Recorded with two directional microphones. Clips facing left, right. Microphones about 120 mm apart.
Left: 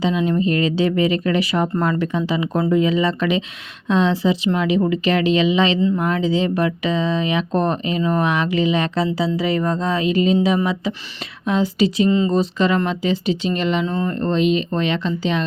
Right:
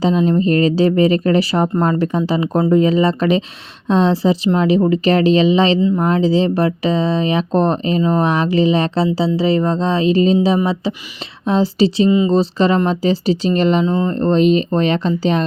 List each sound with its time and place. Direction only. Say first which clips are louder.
0.3 s speech: right 4 dB; 40° right (ahead or behind)
13.8 s speech: right 5 dB; 20° right (ahead or behind); by 15.4 s 40° right (ahead or behind)